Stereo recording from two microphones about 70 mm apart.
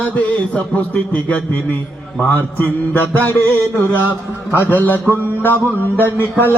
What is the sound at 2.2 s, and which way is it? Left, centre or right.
Mantra, left.